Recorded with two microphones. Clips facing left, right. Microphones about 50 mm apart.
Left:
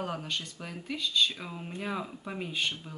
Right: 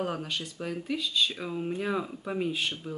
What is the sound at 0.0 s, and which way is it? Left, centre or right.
Speech, right.